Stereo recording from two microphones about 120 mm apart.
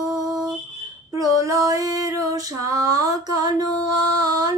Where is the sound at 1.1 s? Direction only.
30° right (ahead or behind).